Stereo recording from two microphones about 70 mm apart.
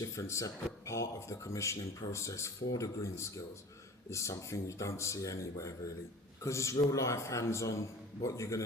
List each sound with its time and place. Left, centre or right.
0.0 s a man's voice: left